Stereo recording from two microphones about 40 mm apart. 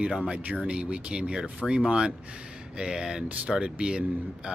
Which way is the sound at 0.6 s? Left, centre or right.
Right.